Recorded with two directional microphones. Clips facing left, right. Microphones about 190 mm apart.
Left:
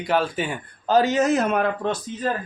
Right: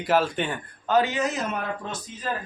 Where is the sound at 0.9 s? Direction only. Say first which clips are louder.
Left 5 dB; 40° left (ahead or behind); by 1.9 s 65° left (ahead or behind).